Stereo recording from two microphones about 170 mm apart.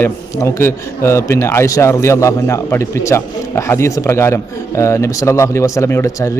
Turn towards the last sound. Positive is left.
turn(degrees=15)  # may be behind; listen again after turning